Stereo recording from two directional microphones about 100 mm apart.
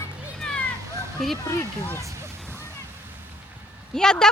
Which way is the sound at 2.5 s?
25° right (ahead or behind).